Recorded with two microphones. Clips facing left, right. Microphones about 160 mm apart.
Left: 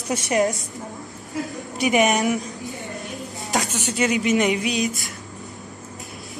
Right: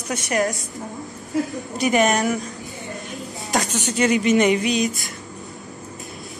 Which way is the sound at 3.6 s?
40° right (ahead or behind).